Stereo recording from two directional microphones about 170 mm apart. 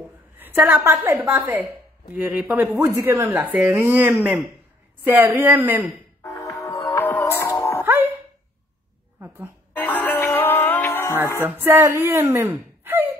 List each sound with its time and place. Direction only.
0.4 s a woman's voice: 10° right (ahead or behind)
6.3 s music: centre (ahead or behind)
6.7 s music: 20° left (ahead or behind)
7.8 s ding-dong: 15° right (ahead or behind)
9.8 s music: 10° left (ahead or behind)
11.4 s speech: 15° right (ahead or behind)